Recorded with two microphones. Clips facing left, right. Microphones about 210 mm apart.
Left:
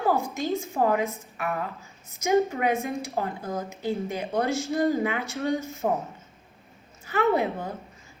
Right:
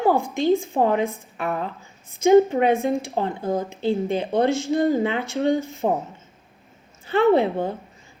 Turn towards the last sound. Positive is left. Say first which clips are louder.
# right 6 dB
turn(degrees=-30)  # may be behind; listen again after turning